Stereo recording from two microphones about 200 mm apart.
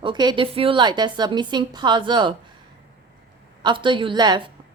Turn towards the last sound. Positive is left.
turn(degrees=-25)  # may be behind; listen again after turning